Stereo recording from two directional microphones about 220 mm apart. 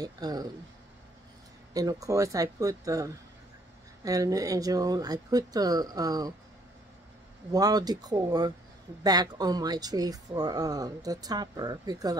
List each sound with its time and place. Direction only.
0.0 s speech: 15° right (ahead or behind)
1.7 s speech: 15° right (ahead or behind)
7.5 s speech: 15° right (ahead or behind)